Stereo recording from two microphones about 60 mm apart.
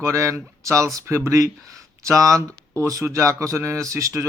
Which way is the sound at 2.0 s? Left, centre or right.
Right.